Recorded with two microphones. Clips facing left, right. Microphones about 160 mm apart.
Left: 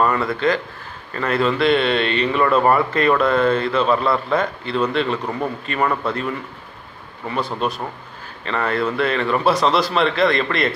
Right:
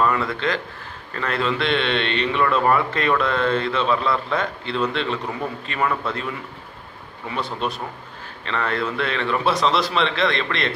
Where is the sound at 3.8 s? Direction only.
45° left (ahead or behind).